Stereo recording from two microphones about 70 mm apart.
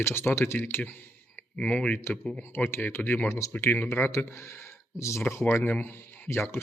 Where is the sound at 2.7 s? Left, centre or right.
Left.